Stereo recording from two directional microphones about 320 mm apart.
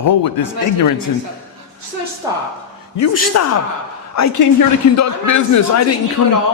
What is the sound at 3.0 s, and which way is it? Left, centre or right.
A woman's voice, left.